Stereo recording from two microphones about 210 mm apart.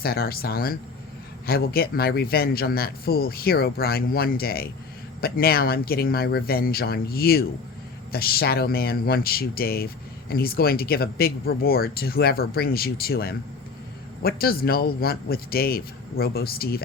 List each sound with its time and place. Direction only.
0.0 s speech: 45° left (ahead or behind)